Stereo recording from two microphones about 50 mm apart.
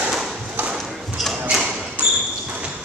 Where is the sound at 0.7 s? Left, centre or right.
Centre.